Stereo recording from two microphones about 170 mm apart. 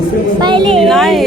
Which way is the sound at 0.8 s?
Centre (ahead or behind).